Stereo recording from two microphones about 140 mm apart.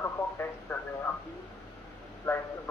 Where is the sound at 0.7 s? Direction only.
10° left (ahead or behind).